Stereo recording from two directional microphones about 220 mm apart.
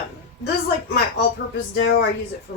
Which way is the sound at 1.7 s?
50° left (ahead or behind).